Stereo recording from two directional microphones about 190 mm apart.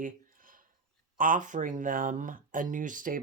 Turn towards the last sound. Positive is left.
turn(degrees=-45)  # may be behind; listen again after turning